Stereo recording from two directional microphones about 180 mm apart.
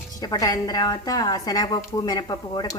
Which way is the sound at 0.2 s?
20° left (ahead or behind).